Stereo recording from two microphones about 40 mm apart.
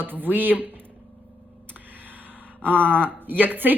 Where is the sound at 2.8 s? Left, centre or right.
Left.